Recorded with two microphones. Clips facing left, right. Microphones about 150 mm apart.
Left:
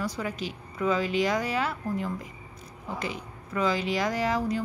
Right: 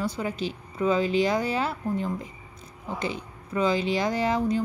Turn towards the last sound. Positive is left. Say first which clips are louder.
# right 3 dB
turn(degrees=-25)  # may be behind; listen again after turning